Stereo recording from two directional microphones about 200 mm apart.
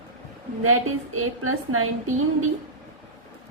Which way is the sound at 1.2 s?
90° right.